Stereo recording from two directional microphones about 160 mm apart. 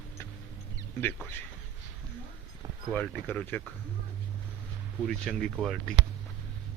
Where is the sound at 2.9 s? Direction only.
10° left (ahead or behind).